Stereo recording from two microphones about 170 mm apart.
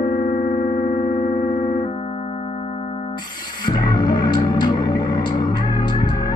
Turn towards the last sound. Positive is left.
turn(degrees=25)  # may be behind; listen again after turning